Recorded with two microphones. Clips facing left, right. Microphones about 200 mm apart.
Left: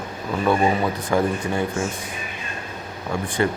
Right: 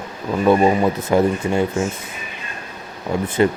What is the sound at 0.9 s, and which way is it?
Speech, 25° right (ahead or behind).